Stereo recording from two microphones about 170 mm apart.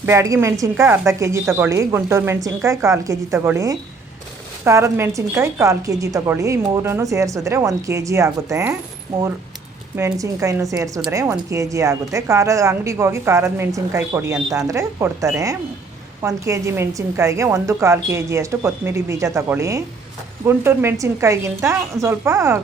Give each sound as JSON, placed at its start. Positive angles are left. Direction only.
{"t": 0.0, "sound": "a woman's voice", "side_deg": -15}
{"t": 9.9, "sound": "a woman's voice", "side_deg": -20}